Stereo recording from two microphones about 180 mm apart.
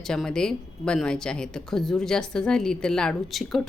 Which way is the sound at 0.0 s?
5° left (ahead or behind).